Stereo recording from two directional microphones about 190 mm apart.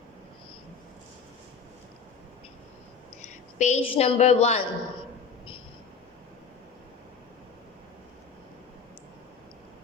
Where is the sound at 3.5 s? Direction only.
35° left (ahead or behind).